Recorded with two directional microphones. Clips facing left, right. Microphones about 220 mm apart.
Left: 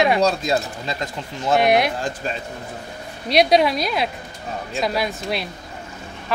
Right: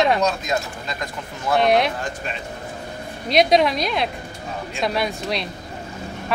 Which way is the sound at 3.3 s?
Centre (ahead or behind).